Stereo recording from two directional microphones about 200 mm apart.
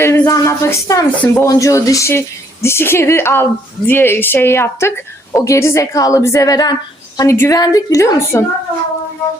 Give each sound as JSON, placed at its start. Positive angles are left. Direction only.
{"t": 0.0, "sound": "speech", "side_deg": 15}